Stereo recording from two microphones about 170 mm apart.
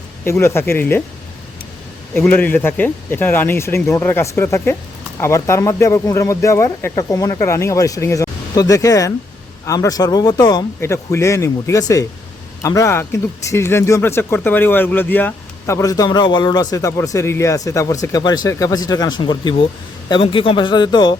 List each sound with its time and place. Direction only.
0.3 s speech: 15° left (ahead or behind)
2.1 s speech: 10° left (ahead or behind); by 21.2 s 25° left (ahead or behind)